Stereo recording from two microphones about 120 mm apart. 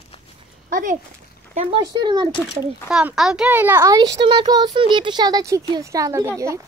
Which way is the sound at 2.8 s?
5° right (ahead or behind).